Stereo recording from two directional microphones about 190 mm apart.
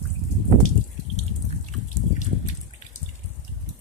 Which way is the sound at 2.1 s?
40° left (ahead or behind).